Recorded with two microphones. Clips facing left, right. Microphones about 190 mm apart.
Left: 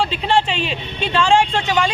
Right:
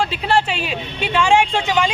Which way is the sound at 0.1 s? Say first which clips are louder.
Left 1 dB; 5° right (ahead or behind).